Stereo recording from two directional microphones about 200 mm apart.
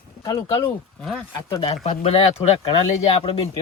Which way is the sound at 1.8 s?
35° left (ahead or behind).